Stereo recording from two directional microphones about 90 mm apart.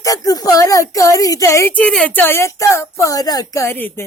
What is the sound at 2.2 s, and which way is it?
Speech, 30° left (ahead or behind).